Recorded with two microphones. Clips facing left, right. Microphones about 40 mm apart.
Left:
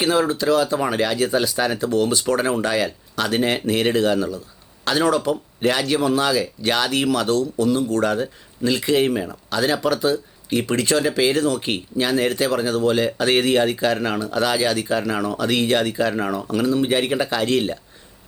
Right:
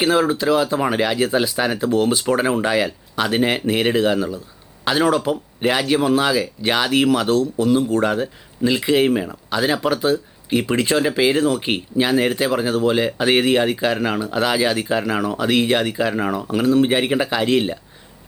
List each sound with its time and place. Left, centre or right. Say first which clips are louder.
0.0 s speech: right 2 dB; centre